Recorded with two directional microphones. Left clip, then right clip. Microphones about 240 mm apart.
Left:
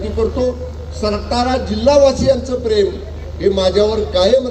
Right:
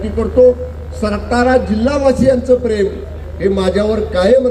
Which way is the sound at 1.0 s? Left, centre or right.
Right.